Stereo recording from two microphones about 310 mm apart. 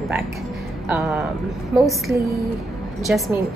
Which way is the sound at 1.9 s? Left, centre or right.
Centre.